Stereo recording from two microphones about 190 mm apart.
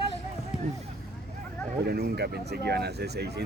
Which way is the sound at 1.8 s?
55° right (ahead or behind).